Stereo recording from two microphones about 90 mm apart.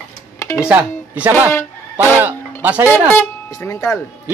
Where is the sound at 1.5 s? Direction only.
25° left (ahead or behind).